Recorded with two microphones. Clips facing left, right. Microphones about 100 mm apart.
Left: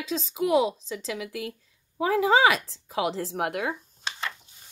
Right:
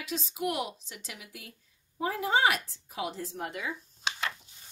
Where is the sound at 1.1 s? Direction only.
90° left; by 3.7 s 60° left (ahead or behind).